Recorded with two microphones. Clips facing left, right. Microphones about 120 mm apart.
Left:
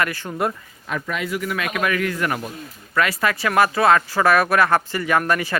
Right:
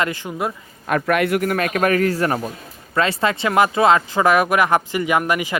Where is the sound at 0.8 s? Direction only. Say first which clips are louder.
Right 8 dB; 60° right (ahead or behind).